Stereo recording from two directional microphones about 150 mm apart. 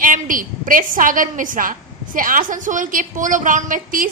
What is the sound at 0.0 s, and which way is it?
A woman's voice, 65° right (ahead or behind).